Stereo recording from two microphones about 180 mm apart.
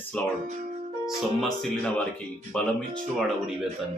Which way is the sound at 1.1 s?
Centre (ahead or behind).